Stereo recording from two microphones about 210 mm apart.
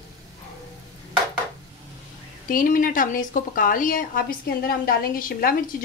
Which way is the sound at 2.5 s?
40° left (ahead or behind).